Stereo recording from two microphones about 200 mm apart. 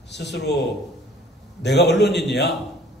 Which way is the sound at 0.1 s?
60° left (ahead or behind).